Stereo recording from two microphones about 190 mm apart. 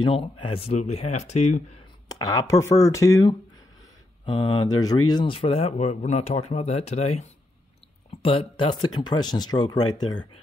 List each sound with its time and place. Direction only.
0.0 s speech: 25° left (ahead or behind)
2.0 s speech: 20° left (ahead or behind)